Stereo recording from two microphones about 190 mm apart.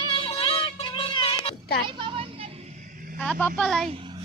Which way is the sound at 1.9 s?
25° right (ahead or behind).